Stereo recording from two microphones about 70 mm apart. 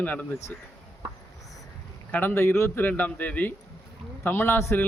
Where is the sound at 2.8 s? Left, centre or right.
Left.